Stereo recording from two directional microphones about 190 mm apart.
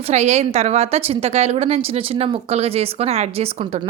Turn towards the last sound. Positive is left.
turn(degrees=-30)  # may be behind; listen again after turning